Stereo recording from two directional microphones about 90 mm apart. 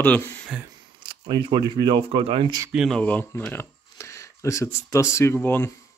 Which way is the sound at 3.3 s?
25° left (ahead or behind).